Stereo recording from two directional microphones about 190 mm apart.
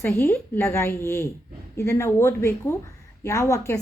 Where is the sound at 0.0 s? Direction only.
15° left (ahead or behind).